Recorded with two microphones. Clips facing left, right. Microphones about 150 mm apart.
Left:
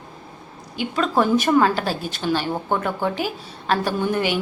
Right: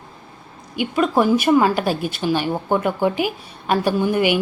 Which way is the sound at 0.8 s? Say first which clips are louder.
Right 3 dB; 10° right (ahead or behind).